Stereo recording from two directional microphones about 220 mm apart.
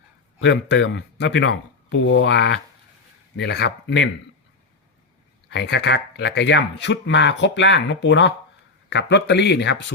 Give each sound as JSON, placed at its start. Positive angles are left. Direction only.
{"t": 0.3, "sound": "speech", "side_deg": 55}
{"t": 5.5, "sound": "speech", "side_deg": 50}